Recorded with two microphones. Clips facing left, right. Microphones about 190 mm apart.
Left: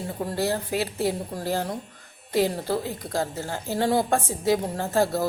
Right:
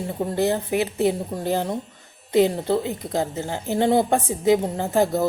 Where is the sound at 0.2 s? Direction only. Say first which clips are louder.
Right 4 dB; 20° right (ahead or behind).